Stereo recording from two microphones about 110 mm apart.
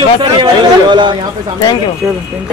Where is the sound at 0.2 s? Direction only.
45° right (ahead or behind).